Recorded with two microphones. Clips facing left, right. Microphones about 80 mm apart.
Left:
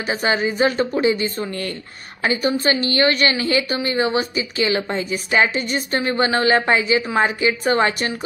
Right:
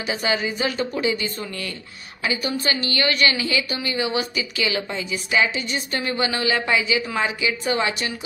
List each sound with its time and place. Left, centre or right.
0.0 s a woman's voice: left